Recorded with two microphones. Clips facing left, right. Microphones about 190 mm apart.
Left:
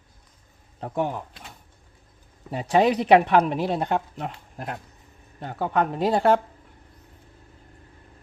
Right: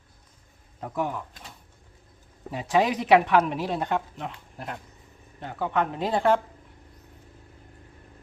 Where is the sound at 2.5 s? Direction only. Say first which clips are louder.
Left 3 dB; 35° left (ahead or behind).